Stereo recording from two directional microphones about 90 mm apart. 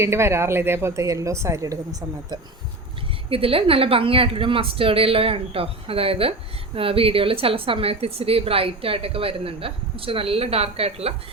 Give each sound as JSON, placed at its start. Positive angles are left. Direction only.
{"t": 0.0, "sound": "a woman's voice", "side_deg": -30}
{"t": 3.2, "sound": "a woman's voice", "side_deg": -90}